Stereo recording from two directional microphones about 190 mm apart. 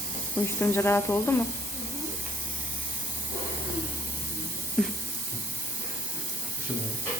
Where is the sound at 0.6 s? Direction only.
10° left (ahead or behind).